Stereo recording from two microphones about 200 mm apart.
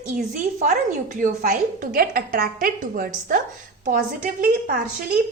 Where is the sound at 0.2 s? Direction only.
40° right (ahead or behind).